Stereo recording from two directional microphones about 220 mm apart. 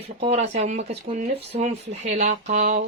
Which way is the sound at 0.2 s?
30° right (ahead or behind).